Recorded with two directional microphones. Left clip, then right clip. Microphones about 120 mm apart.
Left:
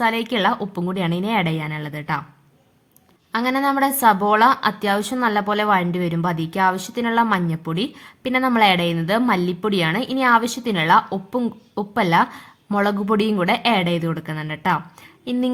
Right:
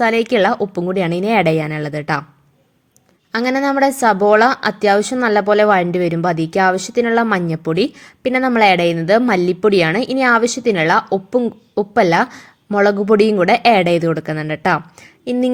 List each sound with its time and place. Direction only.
0.0 s a woman's voice: 30° right (ahead or behind)
3.3 s a woman's voice: 25° right (ahead or behind)
15.2 s speech: 20° right (ahead or behind)